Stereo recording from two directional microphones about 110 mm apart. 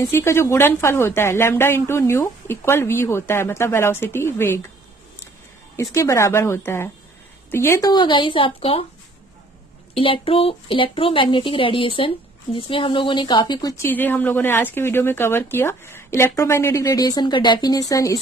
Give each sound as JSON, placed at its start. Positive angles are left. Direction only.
{"t": 0.0, "sound": "speech", "side_deg": 25}
{"t": 5.8, "sound": "speech", "side_deg": 30}
{"t": 7.9, "sound": "speech", "side_deg": 45}
{"t": 9.9, "sound": "speech", "side_deg": 55}
{"t": 13.8, "sound": "speech", "side_deg": 15}